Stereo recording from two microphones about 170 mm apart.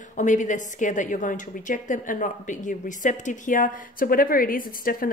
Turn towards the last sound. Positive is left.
turn(degrees=55)  # may be behind; listen again after turning